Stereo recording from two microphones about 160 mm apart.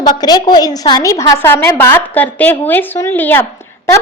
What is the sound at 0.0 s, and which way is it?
A woman's voice, 25° left (ahead or behind).